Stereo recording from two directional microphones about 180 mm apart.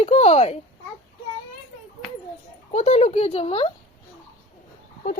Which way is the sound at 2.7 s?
35° left (ahead or behind).